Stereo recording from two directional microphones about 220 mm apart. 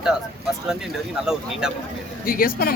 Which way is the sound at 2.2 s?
40° left (ahead or behind).